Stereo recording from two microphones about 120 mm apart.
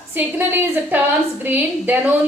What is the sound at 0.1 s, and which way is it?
A woman's voice, 15° right (ahead or behind).